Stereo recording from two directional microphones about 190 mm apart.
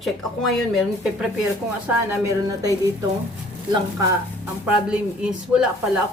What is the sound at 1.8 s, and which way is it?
Speech, 15° right (ahead or behind).